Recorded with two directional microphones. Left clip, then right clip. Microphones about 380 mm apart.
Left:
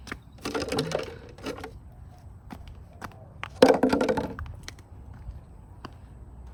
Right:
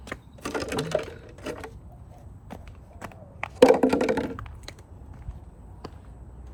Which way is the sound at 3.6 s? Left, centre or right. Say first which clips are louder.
Right 2 dB; left.